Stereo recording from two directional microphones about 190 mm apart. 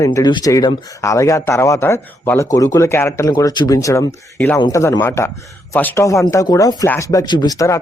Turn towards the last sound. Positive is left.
turn(degrees=15)  # may be behind; listen again after turning